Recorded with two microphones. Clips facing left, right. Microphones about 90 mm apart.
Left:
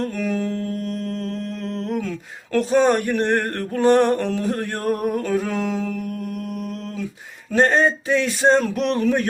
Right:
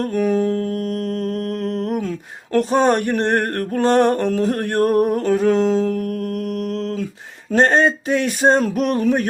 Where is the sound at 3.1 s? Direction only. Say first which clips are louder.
Right 2 dB; 55° right (ahead or behind).